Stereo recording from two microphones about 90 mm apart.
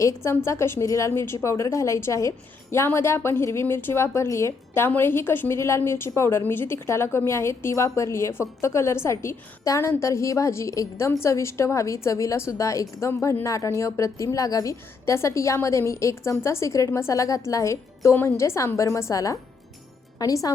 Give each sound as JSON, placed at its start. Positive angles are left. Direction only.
{"t": 0.0, "sound": "a woman's voice", "side_deg": 30}